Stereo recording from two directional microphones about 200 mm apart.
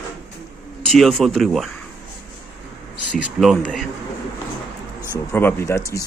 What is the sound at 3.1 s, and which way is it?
Speech, 5° right (ahead or behind).